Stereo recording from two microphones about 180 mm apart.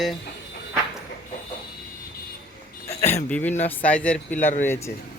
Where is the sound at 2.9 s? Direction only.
40° left (ahead or behind).